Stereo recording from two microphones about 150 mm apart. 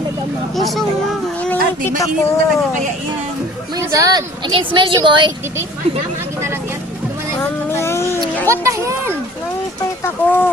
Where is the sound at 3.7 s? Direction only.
20° right (ahead or behind).